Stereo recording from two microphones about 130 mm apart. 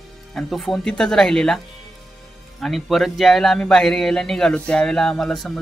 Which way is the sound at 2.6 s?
Centre (ahead or behind).